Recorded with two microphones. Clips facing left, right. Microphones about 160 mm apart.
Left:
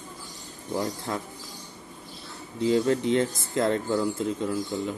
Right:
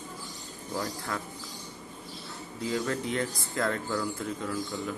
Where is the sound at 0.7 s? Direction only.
25° left (ahead or behind).